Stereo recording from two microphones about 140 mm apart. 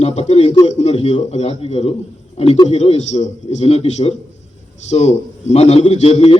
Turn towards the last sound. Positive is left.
turn(degrees=45)  # may be behind; listen again after turning